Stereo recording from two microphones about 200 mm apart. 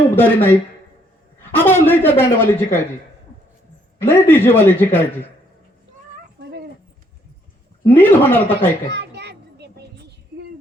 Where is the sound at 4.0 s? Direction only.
10° left (ahead or behind).